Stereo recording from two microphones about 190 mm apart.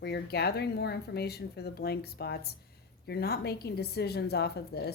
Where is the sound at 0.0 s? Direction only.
60° left (ahead or behind).